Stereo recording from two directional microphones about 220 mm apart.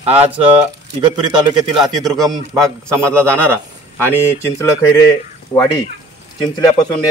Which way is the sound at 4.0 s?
10° left (ahead or behind).